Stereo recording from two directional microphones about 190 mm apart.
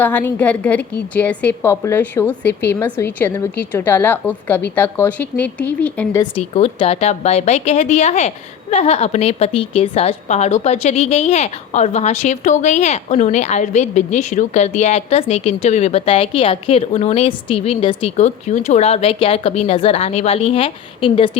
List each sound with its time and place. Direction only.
0.0 s a woman's voice: 10° left (ahead or behind)
6.3 s a woman's voice: 30° left (ahead or behind)